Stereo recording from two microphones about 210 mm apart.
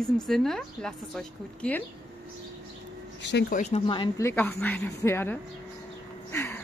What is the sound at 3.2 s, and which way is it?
Speech, 55° left (ahead or behind).